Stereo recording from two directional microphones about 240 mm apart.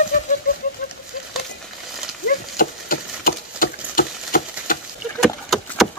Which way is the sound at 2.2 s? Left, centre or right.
Left.